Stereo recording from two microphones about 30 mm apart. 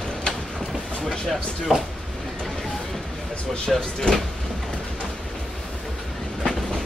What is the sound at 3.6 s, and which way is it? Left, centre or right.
Speech, left.